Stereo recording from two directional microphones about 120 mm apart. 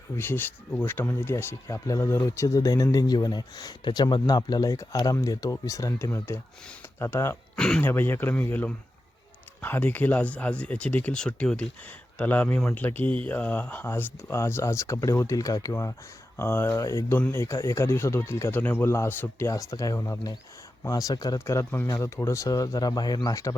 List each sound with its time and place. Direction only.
0.2 s speech: 15° left (ahead or behind)
7.5 s speech: 5° left (ahead or behind)
7.9 s speech: 15° left (ahead or behind)